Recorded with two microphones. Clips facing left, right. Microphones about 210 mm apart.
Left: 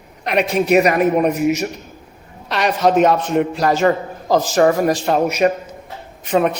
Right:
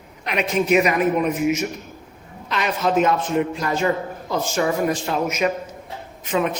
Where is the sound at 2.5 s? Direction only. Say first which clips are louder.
Left 5 dB; 70° left (ahead or behind).